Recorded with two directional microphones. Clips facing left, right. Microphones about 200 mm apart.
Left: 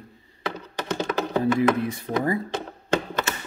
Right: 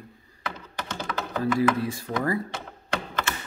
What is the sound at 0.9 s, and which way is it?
Computer keyboard, 20° left (ahead or behind).